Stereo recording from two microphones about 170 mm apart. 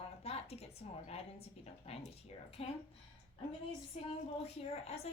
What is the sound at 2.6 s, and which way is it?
Speech, 35° left (ahead or behind).